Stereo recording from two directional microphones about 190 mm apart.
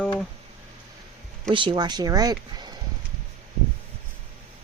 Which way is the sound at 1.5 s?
25° right (ahead or behind).